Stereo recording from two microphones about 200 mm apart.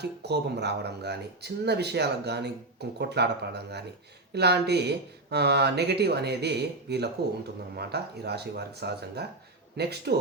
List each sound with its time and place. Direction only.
0.0 s speech: 55° right (ahead or behind)